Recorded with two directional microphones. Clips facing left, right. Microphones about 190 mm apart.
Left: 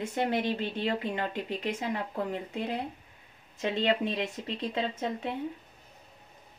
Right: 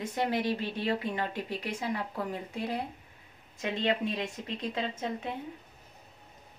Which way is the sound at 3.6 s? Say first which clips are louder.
Left 2 dB; 35° left (ahead or behind).